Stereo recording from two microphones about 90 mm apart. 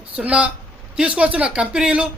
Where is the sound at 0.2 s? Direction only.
15° right (ahead or behind).